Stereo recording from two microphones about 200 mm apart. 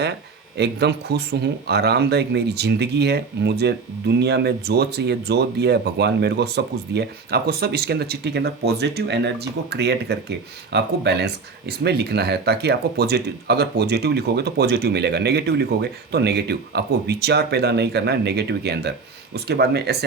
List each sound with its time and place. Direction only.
0.5 s speech: 55° right (ahead or behind)